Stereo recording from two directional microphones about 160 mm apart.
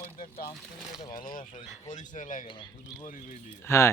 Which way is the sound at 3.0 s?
55° left (ahead or behind).